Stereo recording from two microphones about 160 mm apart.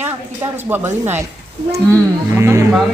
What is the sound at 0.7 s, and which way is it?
Speech, 15° right (ahead or behind).